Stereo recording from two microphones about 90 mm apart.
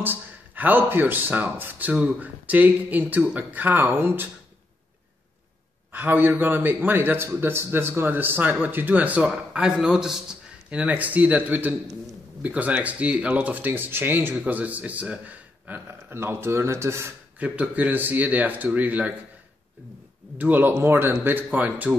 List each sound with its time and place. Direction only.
0.0 s speech: 20° right (ahead or behind)
5.9 s a man's voice: 20° right (ahead or behind)
17.4 s speech: 15° right (ahead or behind)
20.3 s speech: 20° right (ahead or behind)